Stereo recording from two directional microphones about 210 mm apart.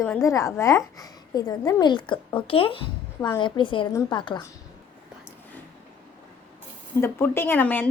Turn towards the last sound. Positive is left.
turn(degrees=10)  # may be behind; listen again after turning